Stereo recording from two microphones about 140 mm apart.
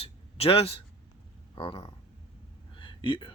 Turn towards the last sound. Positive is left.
turn(degrees=35)  # may be behind; listen again after turning